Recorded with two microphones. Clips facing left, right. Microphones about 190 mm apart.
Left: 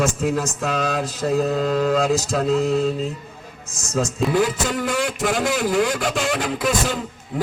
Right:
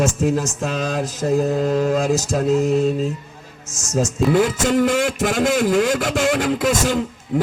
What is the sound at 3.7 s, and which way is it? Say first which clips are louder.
Speech: right 2 dB; 60° left (ahead or behind).